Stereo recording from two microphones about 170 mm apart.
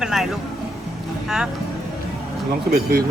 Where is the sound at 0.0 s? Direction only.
Centre (ahead or behind).